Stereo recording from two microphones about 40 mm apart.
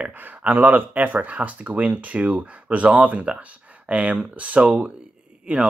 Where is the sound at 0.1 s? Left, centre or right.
Right.